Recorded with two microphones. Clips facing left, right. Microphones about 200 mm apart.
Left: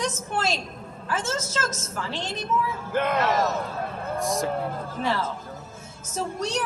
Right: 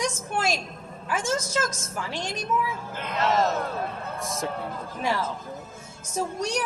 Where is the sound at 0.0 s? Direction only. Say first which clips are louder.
Even; 10° right (ahead or behind).